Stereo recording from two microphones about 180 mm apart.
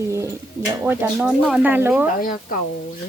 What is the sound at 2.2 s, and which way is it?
Speech, 50° left (ahead or behind).